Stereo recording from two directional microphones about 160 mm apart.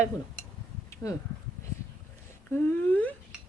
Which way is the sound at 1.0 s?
20° left (ahead or behind).